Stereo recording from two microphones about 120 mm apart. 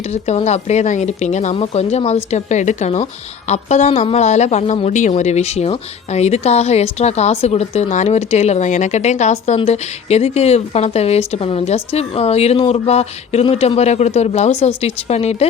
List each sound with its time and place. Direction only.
0.1 s speech: 65° left (ahead or behind)
1.5 s speech: 60° left (ahead or behind)
4.9 s speech: 80° left; by 15.4 s 60° left (ahead or behind)